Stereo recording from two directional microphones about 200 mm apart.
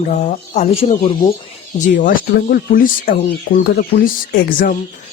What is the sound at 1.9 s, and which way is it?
Speech, 45° left (ahead or behind).